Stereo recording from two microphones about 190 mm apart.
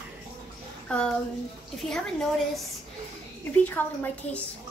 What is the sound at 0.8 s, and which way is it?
A child's voice, 5° left (ahead or behind).